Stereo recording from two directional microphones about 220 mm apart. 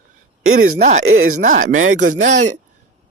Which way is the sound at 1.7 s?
65° right (ahead or behind).